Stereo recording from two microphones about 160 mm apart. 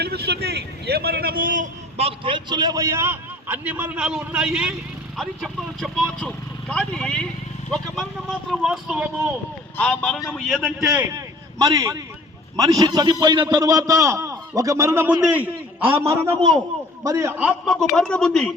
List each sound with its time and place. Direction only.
0.0 s a man's voice: 90° right; by 1.7 s 55° right (ahead or behind)
2.0 s a man's voice: 35° right (ahead or behind); by 9.0 s 5° right (ahead or behind)
9.7 s speech: 10° left (ahead or behind)
11.6 s a man's voice: 20° right (ahead or behind)
17.9 s speech: 5° left (ahead or behind)